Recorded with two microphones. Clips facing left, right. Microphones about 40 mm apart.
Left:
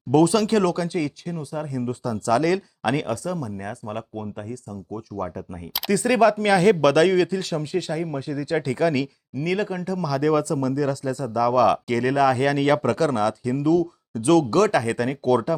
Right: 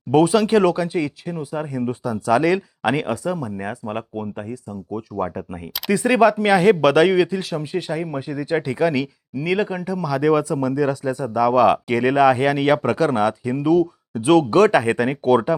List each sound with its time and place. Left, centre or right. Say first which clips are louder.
0.1 s speech: right 3 dB; centre